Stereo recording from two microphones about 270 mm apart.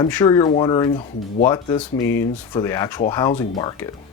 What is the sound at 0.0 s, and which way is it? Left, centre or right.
Speech, centre.